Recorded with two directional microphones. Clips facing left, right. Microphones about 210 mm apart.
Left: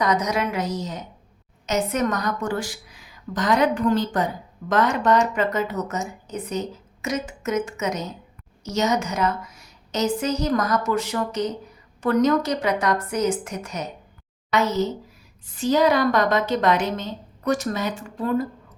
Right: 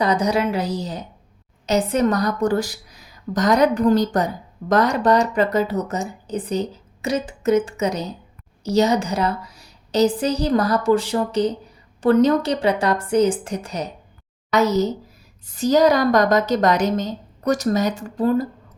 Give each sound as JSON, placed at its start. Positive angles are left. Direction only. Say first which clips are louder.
{"t": 0.0, "sound": "speech", "louder": "right 3 dB", "side_deg": -30}